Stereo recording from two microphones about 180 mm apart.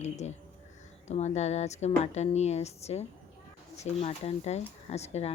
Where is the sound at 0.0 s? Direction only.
40° left (ahead or behind).